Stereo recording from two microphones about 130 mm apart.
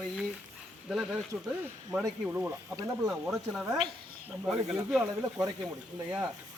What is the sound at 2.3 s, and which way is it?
Speech, 10° right (ahead or behind).